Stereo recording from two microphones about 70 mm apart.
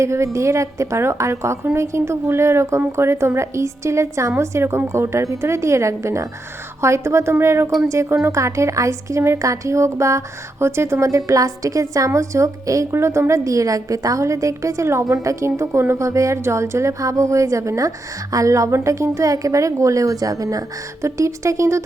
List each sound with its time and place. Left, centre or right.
0.0 s a woman's voice: right